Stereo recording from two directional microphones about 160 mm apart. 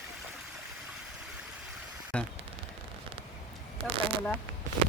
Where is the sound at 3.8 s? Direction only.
35° right (ahead or behind).